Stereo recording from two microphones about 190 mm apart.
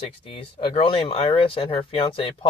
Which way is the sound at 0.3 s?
30° left (ahead or behind).